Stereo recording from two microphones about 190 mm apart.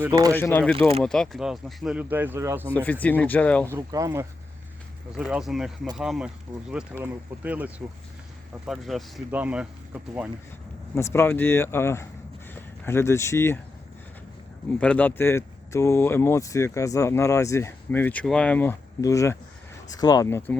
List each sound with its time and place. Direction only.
0.3 s speech: 10° left (ahead or behind); by 2.6 s 10° right (ahead or behind)
2.7 s speech: 10° left (ahead or behind)
3.7 s speech: 15° right (ahead or behind)
5.1 s speech: 5° right (ahead or behind)
10.9 s speech: 15° left (ahead or behind)
14.8 s speech: 5° left (ahead or behind)